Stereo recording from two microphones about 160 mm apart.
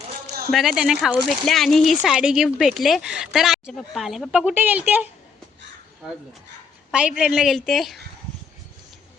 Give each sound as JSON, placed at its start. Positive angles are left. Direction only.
{"t": 0.5, "sound": "speech", "side_deg": 0}
{"t": 6.9, "sound": "speech", "side_deg": -5}